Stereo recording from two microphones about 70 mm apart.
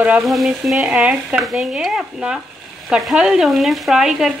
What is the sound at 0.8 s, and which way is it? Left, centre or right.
Speech, centre.